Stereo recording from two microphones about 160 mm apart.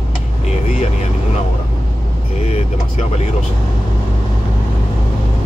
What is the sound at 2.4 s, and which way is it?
Speech, 45° left (ahead or behind).